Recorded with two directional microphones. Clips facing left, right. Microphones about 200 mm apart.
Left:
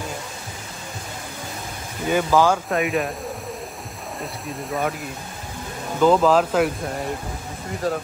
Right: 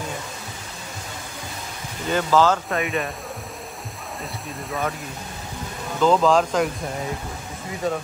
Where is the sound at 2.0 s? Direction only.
10° left (ahead or behind).